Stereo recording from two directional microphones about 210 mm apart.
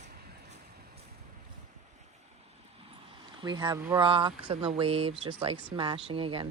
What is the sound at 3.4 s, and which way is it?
Speech, 20° right (ahead or behind).